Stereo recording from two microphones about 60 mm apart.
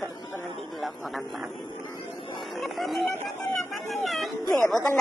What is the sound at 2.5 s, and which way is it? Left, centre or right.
Speech, centre.